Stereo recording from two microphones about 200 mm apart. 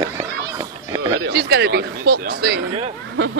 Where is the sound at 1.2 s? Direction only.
50° right (ahead or behind).